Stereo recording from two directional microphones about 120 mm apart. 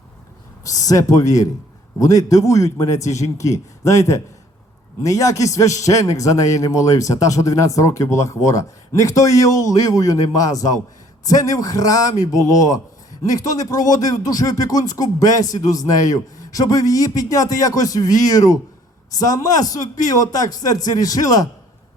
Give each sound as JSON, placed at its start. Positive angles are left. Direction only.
{"t": 0.6, "sound": "a man's voice", "side_deg": 30}